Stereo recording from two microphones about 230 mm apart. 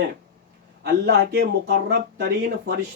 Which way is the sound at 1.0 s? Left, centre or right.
Right.